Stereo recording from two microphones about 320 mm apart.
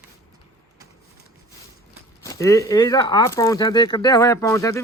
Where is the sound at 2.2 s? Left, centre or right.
Centre.